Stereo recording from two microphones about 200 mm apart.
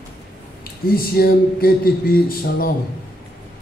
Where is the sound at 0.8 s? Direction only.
50° left (ahead or behind).